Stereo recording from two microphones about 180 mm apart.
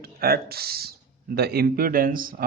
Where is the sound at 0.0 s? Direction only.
60° right (ahead or behind).